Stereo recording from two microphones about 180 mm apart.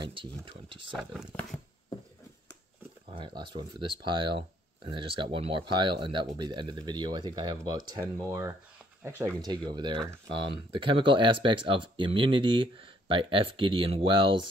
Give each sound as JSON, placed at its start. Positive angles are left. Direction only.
{"t": 0.0, "sound": "speech", "side_deg": -30}
{"t": 0.9, "sound": "speech", "side_deg": 0}
{"t": 3.1, "sound": "speech", "side_deg": -25}